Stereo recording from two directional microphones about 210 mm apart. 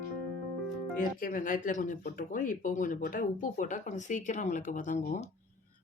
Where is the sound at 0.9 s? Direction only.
40° left (ahead or behind).